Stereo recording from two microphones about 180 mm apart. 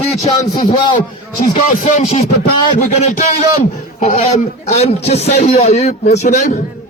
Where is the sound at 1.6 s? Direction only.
40° left (ahead or behind).